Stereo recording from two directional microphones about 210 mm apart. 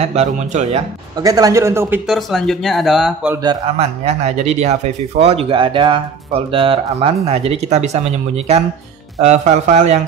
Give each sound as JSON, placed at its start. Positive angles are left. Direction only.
{"t": 0.0, "sound": "speech", "side_deg": -30}
{"t": 1.2, "sound": "speech", "side_deg": -15}
{"t": 2.0, "sound": "speech", "side_deg": 0}
{"t": 3.4, "sound": "speech", "side_deg": -30}
{"t": 9.2, "sound": "speech", "side_deg": -35}